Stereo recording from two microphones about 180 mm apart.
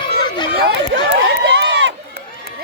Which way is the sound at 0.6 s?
70° right (ahead or behind).